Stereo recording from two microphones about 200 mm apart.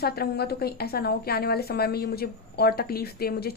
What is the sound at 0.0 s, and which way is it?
A woman's voice, 50° left (ahead or behind).